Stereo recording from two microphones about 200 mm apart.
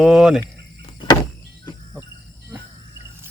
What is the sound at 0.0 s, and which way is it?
Speech, centre (ahead or behind).